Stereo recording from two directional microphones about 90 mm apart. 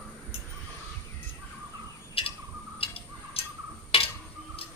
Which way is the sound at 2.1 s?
90° left.